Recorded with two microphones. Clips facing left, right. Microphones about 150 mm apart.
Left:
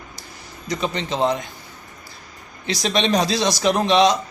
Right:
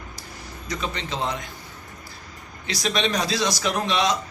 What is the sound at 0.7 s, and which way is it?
Speech, 20° left (ahead or behind).